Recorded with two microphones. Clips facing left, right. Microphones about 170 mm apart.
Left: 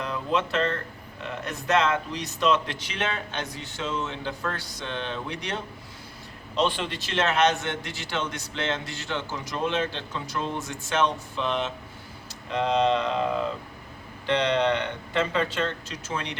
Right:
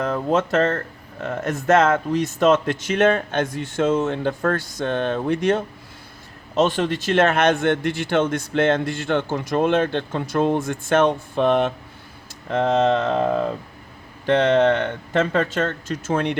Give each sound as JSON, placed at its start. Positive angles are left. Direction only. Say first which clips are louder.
{"t": 0.0, "sound": "speech", "louder": "right 7 dB", "side_deg": -45}